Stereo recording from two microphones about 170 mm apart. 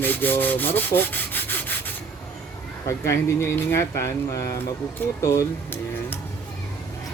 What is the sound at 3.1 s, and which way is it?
Rub, 15° left (ahead or behind).